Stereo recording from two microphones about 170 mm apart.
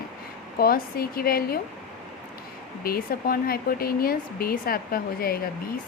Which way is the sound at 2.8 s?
60° left (ahead or behind).